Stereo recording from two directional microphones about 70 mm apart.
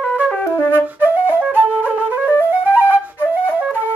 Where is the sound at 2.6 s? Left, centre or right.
Right.